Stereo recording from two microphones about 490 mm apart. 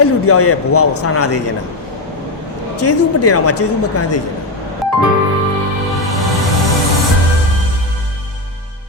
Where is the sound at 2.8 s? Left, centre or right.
Left.